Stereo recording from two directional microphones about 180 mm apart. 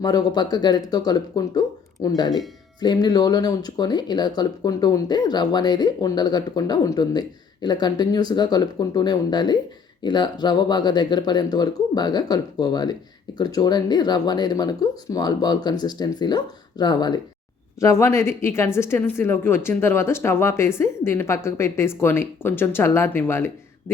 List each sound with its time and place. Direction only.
0.0 s speech: 20° left (ahead or behind)